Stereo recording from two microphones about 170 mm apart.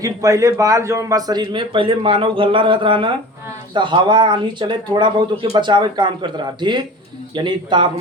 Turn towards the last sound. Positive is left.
turn(degrees=-25)  # may be behind; listen again after turning